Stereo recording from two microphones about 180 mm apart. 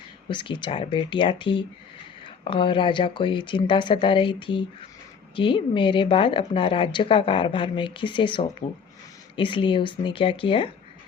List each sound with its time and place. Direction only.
0.3 s a woman's voice: 25° left (ahead or behind)